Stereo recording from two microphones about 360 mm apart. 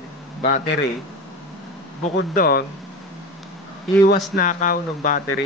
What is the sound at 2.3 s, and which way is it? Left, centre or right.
Speech, left.